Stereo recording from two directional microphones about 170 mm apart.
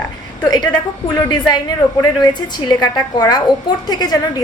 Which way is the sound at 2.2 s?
25° left (ahead or behind).